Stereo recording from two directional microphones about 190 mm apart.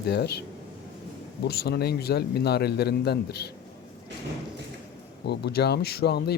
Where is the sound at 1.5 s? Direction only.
55° left (ahead or behind).